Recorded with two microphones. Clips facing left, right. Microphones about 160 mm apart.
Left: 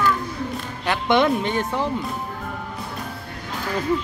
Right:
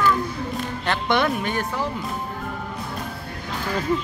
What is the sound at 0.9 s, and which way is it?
Speech, 20° left (ahead or behind).